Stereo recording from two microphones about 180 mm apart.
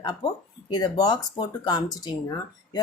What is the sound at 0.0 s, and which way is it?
A woman's voice, 20° left (ahead or behind).